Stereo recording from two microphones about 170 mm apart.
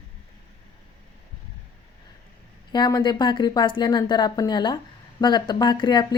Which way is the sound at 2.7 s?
25° left (ahead or behind).